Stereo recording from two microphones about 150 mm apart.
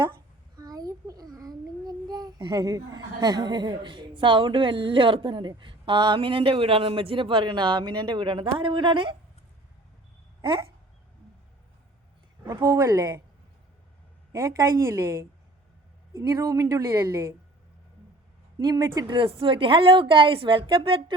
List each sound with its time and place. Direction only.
0.5 s a child's voice: 25° right (ahead or behind)
12.4 s a woman's voice: 25° right (ahead or behind)
14.3 s a woman's voice: 20° right (ahead or behind)
18.6 s a woman's voice: 25° right (ahead or behind)
19.1 s a woman's voice: 35° right (ahead or behind)